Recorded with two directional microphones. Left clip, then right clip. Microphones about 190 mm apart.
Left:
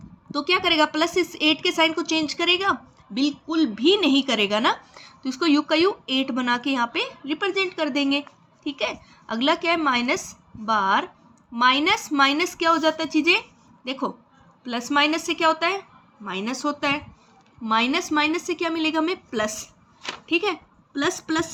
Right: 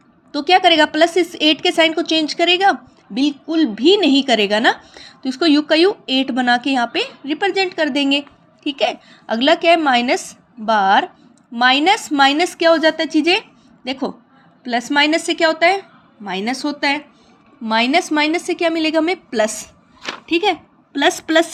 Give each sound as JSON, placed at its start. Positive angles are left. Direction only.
{"t": 0.3, "sound": "a woman's voice", "side_deg": -25}